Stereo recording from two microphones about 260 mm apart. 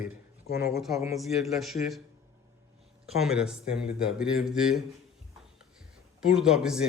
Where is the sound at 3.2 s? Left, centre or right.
Centre.